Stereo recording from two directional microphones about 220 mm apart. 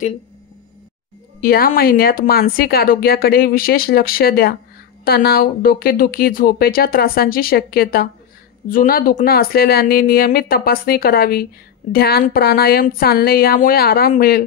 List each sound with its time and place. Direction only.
1.4 s speech: 45° left (ahead or behind)